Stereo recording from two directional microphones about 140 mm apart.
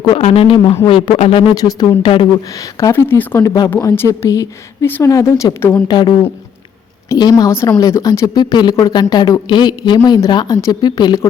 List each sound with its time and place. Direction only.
0.2 s speech: 40° left (ahead or behind); by 2.0 s 25° left (ahead or behind)
2.0 s speech: 40° left (ahead or behind)
2.6 s speech: 20° left (ahead or behind)
5.9 s speech: 30° left (ahead or behind)